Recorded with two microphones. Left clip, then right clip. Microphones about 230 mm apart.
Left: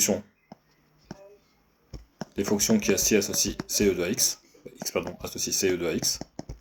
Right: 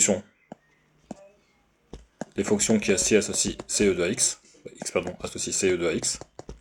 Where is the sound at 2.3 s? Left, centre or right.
Right.